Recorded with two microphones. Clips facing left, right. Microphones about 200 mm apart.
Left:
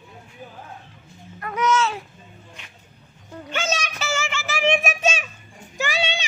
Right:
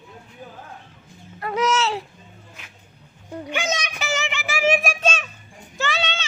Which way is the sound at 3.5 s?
15° right (ahead or behind).